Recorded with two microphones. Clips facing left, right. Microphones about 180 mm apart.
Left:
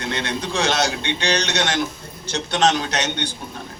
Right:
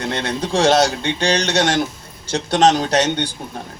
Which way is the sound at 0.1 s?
45° right (ahead or behind).